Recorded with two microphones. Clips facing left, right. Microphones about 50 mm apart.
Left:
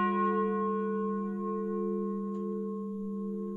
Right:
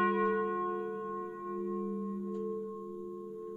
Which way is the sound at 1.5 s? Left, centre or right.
Centre.